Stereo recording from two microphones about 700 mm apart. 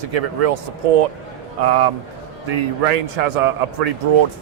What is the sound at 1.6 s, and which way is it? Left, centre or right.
A man's voice, right.